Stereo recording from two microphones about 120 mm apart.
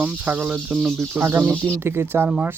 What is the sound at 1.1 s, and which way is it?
Speech, 15° right (ahead or behind).